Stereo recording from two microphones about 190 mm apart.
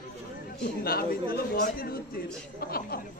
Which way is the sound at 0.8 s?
55° left (ahead or behind).